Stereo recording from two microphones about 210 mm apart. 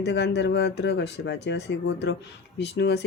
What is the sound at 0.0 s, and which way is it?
Speech, 55° left (ahead or behind).